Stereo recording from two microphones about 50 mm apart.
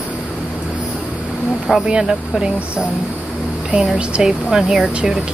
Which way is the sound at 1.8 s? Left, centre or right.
Centre.